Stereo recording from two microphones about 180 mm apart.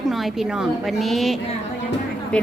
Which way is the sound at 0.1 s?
Centre (ahead or behind).